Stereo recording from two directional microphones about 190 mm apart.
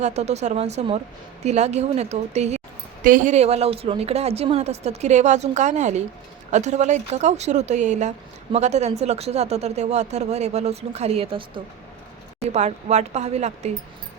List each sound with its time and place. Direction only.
0.0 s a woman's voice: 35° right (ahead or behind)